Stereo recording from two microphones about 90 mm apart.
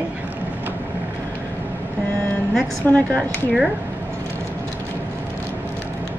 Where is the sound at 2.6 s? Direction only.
10° left (ahead or behind).